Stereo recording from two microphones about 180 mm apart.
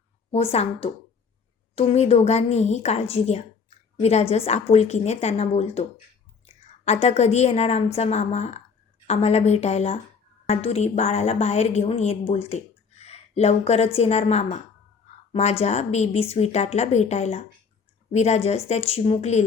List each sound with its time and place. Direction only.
0.3 s a woman's voice: 35° left (ahead or behind)